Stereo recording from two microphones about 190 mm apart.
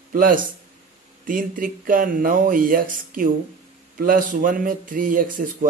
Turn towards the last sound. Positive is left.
turn(degrees=-45)  # may be behind; listen again after turning